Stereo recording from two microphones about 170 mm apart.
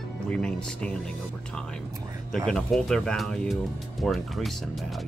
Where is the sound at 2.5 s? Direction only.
5° left (ahead or behind).